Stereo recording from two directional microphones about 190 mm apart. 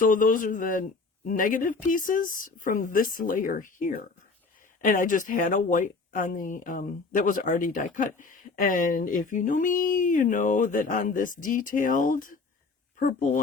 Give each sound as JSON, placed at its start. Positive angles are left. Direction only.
{"t": 0.0, "sound": "speech", "side_deg": 45}